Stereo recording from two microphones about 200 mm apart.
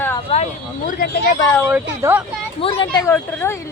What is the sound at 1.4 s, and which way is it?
Speech, 15° left (ahead or behind).